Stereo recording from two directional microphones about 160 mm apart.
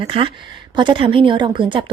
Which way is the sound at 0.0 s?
35° right (ahead or behind).